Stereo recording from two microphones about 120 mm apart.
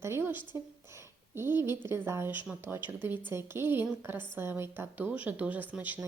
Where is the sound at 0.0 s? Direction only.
20° right (ahead or behind).